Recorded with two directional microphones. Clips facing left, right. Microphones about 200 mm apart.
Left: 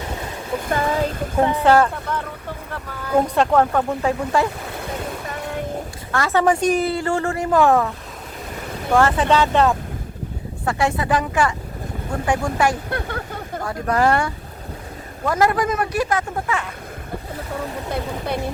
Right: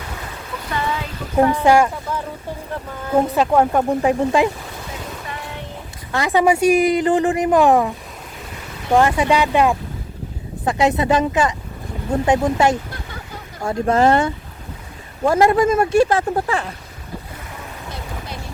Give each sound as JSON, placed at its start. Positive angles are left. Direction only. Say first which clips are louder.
{"t": 0.7, "sound": "boat", "louder": "left 4 dB", "side_deg": 45}
{"t": 1.6, "sound": "a woman's voice", "louder": "right 1 dB", "side_deg": -15}
{"t": 3.2, "sound": "a woman's voice", "louder": "right 1 dB", "side_deg": -5}
{"t": 6.1, "sound": "a woman's voice", "louder": "right 2 dB", "side_deg": -15}
{"t": 12.9, "sound": "speech", "louder": "left 7 dB", "side_deg": 60}
{"t": 13.7, "sound": "speech", "louder": "right 4 dB", "side_deg": -25}